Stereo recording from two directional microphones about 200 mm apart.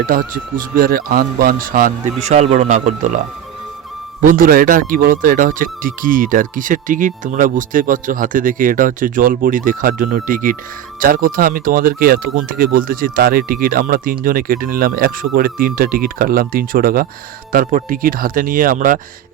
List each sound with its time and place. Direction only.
0.0 s speech: 45° right (ahead or behind)
2.2 s speech: 35° right (ahead or behind)
4.2 s speech: 45° right (ahead or behind)